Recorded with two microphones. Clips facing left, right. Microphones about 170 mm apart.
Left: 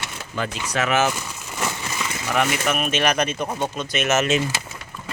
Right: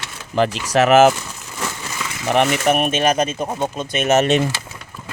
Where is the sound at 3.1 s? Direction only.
25° right (ahead or behind).